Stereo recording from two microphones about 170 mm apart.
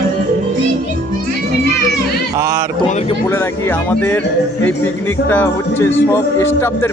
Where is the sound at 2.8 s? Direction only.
40° left (ahead or behind).